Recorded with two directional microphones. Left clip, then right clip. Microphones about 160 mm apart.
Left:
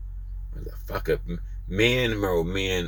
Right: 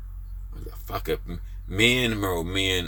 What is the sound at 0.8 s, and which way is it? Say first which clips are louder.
Speech: left 2 dB; 25° right (ahead or behind).